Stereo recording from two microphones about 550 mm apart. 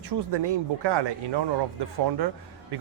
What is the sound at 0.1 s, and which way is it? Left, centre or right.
A man's voice, right.